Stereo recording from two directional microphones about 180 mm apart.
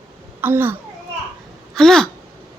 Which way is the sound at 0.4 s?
10° right (ahead or behind).